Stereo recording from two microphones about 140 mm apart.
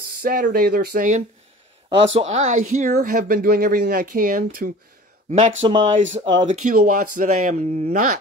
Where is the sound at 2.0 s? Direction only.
50° right (ahead or behind); by 4.7 s 80° right.